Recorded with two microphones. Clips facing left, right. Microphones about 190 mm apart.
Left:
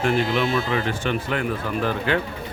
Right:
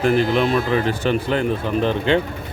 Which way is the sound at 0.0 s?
35° right (ahead or behind).